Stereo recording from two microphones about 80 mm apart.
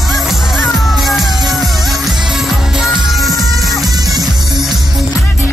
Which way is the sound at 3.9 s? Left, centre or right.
Right.